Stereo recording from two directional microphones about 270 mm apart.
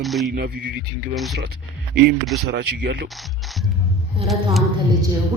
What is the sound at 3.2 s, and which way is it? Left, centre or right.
Speech, centre.